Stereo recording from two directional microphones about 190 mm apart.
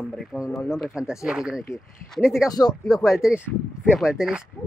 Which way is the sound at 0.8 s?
5° right (ahead or behind).